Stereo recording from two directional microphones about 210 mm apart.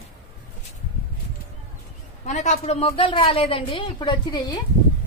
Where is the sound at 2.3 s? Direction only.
35° left (ahead or behind).